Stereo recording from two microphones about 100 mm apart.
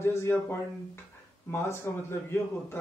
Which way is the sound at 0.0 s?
25° left (ahead or behind).